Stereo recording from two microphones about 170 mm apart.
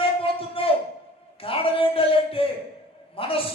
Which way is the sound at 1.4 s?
35° left (ahead or behind).